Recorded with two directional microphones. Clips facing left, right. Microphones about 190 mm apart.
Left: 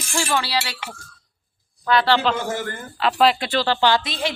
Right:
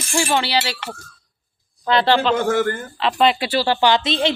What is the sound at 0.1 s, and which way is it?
Speech, 20° right (ahead or behind).